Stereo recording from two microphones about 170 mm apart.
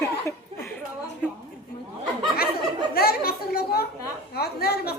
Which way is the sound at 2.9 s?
65° left (ahead or behind).